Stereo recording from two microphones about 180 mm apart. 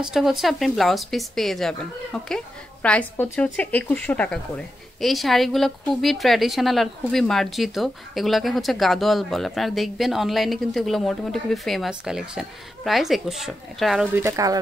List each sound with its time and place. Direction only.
0.0 s a woman's voice: 5° right (ahead or behind)
14.1 s speech: 15° right (ahead or behind)